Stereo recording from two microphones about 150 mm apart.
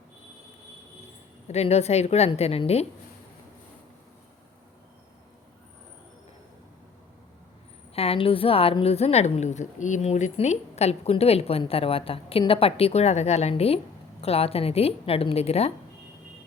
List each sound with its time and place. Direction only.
1.5 s a woman's voice: 45° left (ahead or behind)
7.9 s a woman's voice: 40° left (ahead or behind)